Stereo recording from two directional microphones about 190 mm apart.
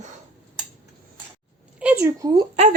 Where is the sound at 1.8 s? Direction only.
10° right (ahead or behind).